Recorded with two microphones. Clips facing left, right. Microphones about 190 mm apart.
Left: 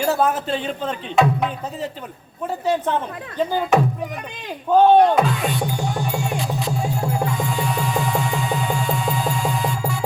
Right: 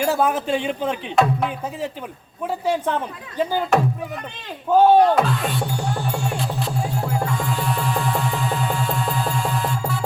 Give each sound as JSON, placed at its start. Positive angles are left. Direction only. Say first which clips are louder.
{"t": 0.0, "sound": "a man's voice", "louder": "even", "side_deg": -10}
{"t": 4.7, "sound": "speech", "louder": "left 1 dB", "side_deg": -5}
{"t": 6.6, "sound": "music", "louder": "left 1 dB", "side_deg": 0}